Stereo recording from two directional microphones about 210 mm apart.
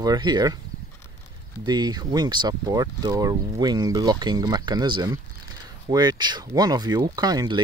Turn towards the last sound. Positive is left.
turn(degrees=-20)  # may be behind; listen again after turning